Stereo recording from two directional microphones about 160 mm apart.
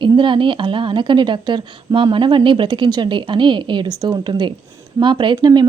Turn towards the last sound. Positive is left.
turn(degrees=-25)  # may be behind; listen again after turning